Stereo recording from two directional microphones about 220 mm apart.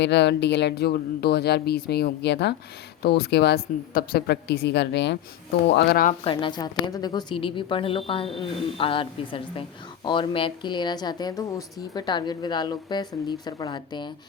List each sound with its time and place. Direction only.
0.0 s speech: 50° left (ahead or behind)
6.2 s speech: 25° left (ahead or behind)